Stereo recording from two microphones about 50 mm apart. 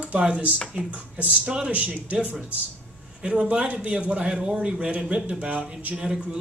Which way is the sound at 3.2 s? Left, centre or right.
Right.